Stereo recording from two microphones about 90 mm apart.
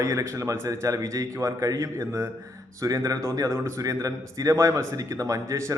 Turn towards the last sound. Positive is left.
turn(degrees=-35)  # may be behind; listen again after turning